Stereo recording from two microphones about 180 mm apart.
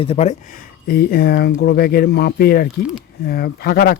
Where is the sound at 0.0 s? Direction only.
35° left (ahead or behind).